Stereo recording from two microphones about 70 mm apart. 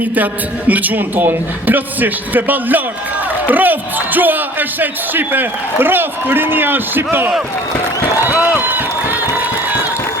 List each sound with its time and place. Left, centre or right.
0.7 s a man's voice: right
8.4 s a sound: right
9.3 s crowd: right